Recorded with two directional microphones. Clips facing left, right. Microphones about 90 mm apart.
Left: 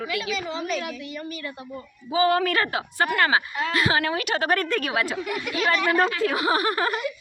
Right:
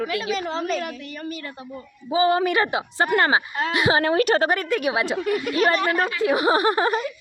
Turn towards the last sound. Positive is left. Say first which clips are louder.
# right 4 dB
turn(degrees=-25)  # may be behind; listen again after turning